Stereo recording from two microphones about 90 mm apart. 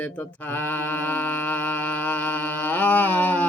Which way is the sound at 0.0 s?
20° left (ahead or behind).